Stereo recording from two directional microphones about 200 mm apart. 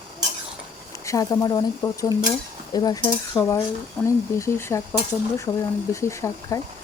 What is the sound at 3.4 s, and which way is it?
Cutlery, centre (ahead or behind).